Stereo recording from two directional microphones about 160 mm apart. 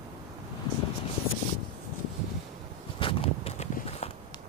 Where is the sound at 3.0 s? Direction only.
35° left (ahead or behind).